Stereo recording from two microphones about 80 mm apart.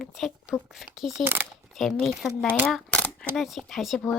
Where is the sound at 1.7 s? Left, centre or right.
Centre.